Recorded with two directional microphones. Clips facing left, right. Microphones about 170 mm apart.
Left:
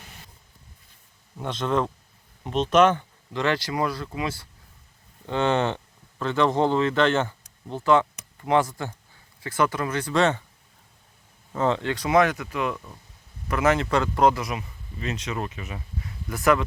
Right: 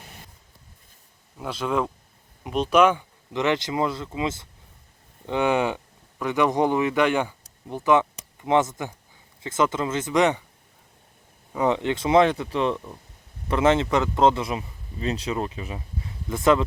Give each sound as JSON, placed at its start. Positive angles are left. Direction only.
{"t": 1.4, "sound": "speech", "side_deg": -5}
{"t": 11.5, "sound": "speech", "side_deg": -15}